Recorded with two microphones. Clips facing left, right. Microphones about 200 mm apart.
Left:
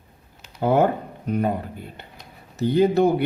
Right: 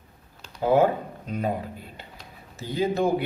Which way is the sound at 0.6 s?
60° left (ahead or behind).